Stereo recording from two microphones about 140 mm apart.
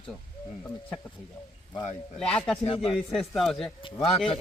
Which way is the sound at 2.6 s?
45° left (ahead or behind).